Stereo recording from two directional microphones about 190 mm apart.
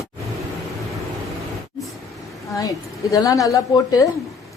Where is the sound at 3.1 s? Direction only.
15° left (ahead or behind).